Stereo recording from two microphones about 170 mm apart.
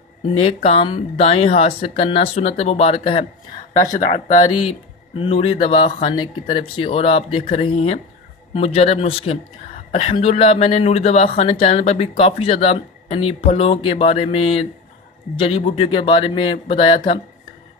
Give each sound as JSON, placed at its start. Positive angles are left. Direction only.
{"t": 0.3, "sound": "speech", "side_deg": 35}
{"t": 4.0, "sound": "speech", "side_deg": 45}
{"t": 4.4, "sound": "speech", "side_deg": 30}